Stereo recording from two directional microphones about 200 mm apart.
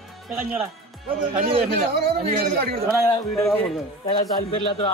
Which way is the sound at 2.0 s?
50° right (ahead or behind).